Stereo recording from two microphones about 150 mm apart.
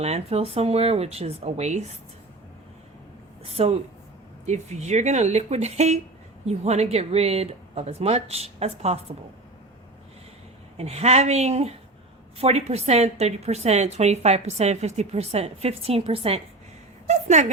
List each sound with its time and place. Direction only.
0.0 s a woman's voice: 45° right (ahead or behind)
3.4 s a woman's voice: 45° right (ahead or behind)
10.8 s a woman's voice: 45° right (ahead or behind)